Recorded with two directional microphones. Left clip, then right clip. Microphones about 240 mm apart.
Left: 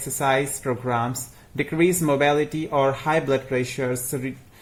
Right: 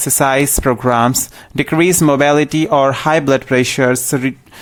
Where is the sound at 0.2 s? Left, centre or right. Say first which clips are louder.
Right 8 dB; right.